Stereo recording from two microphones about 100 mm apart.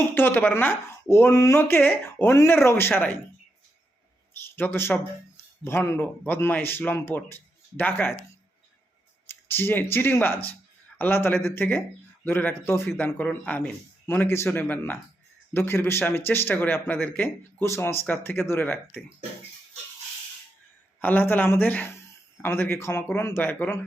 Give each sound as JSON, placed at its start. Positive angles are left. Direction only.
{"t": 0.1, "sound": "a man's voice", "side_deg": 20}
{"t": 1.6, "sound": "a man's voice", "side_deg": 20}
{"t": 4.4, "sound": "a sound", "side_deg": 20}
{"t": 5.6, "sound": "a man's voice", "side_deg": 25}
{"t": 9.2, "sound": "a man's voice", "side_deg": 20}
{"t": 13.1, "sound": "a man's voice", "side_deg": 15}
{"t": 21.0, "sound": "a man's voice", "side_deg": 20}